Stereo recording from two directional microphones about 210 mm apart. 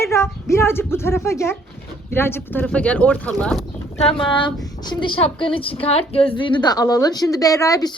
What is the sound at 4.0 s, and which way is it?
A woman's voice, 25° left (ahead or behind).